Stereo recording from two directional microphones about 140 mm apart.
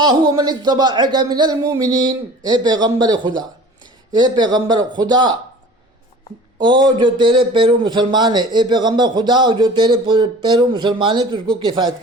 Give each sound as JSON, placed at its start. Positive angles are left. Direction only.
{"t": 0.0, "sound": "speech", "side_deg": -30}
{"t": 6.6, "sound": "speech", "side_deg": -30}